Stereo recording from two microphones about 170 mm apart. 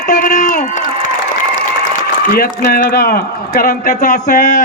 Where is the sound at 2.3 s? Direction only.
60° left (ahead or behind).